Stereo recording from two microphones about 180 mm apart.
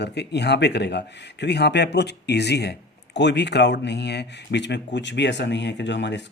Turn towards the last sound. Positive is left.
turn(degrees=75)  # may be behind; listen again after turning